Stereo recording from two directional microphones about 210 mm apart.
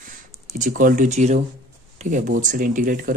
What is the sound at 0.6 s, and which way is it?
Speech, 40° right (ahead or behind).